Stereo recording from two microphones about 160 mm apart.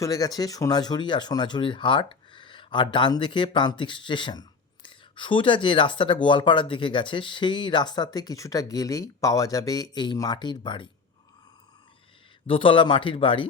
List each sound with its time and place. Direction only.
0.0 s speech: 25° left (ahead or behind)
12.5 s speech: 30° left (ahead or behind)